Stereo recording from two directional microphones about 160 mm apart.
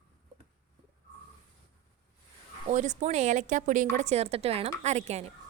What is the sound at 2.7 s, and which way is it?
A woman's voice, 50° right (ahead or behind).